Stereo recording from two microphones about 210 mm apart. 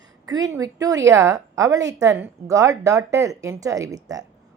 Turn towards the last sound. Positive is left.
turn(degrees=-15)  # may be behind; listen again after turning